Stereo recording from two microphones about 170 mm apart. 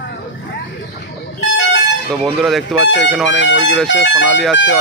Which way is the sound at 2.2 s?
Centre (ahead or behind).